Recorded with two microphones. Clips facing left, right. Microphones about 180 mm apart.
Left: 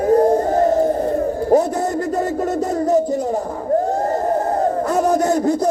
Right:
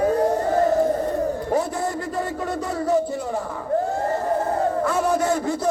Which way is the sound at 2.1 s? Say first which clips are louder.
Left 6 dB; 40° left (ahead or behind).